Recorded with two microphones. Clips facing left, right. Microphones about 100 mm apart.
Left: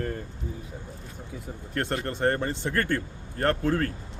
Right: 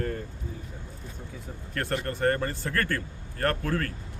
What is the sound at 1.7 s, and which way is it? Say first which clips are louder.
Speech: left 1 dB; 20° left (ahead or behind).